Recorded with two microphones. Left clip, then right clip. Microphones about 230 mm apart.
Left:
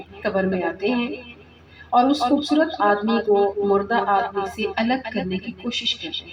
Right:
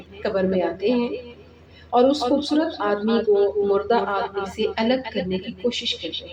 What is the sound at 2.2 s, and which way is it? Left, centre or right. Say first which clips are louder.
Speech: left 2 dB; left.